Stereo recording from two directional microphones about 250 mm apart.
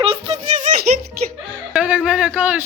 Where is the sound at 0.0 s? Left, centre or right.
Right.